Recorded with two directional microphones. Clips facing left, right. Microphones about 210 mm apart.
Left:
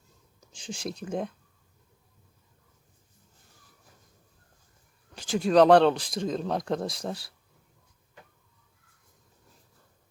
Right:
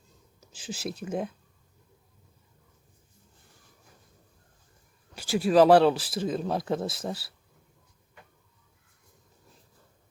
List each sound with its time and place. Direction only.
0.3 s speech: 5° right (ahead or behind)
5.1 s speech: 5° right (ahead or behind)